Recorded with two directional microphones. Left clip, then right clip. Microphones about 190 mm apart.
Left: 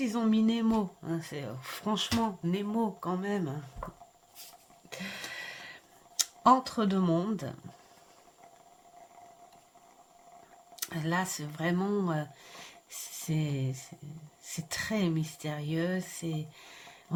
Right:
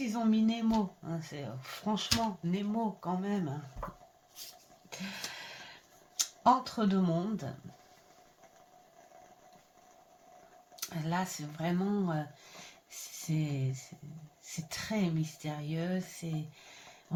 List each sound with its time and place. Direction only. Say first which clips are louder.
0.0 s speech: left 2 dB; 50° left (ahead or behind)
4.9 s a sound: left 2 dB; 45° left (ahead or behind)
6.1 s speech: left 3 dB; 50° left (ahead or behind)
10.8 s speech: left 3 dB; 50° left (ahead or behind)